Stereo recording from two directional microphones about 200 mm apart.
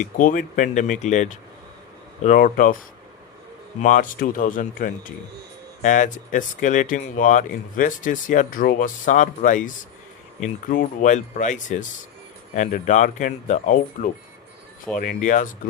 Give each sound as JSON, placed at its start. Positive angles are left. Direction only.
{"t": 0.0, "sound": "speech", "side_deg": 40}
{"t": 3.8, "sound": "speech", "side_deg": 40}